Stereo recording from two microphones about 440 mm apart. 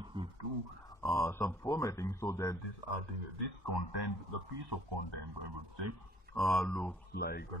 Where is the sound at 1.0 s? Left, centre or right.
Centre.